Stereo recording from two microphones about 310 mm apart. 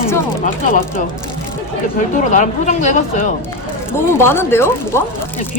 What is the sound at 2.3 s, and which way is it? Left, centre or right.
Speech, left.